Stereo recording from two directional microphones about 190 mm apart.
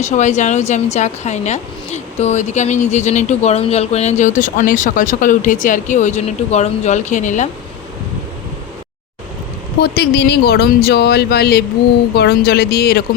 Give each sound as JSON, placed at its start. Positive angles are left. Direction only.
{"t": 0.0, "sound": "speech", "side_deg": 35}
{"t": 9.8, "sound": "speech", "side_deg": 60}